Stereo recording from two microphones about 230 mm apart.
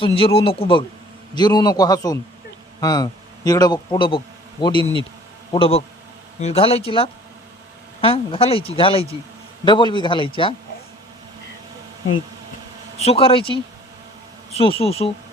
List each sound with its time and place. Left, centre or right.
0.0 s a man's voice: left
13.0 s speech: left